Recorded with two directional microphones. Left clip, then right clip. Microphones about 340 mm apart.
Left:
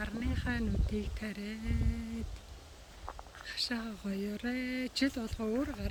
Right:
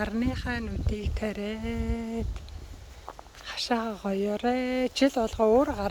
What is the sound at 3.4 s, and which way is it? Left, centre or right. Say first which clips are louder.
Speech: right 8 dB; centre.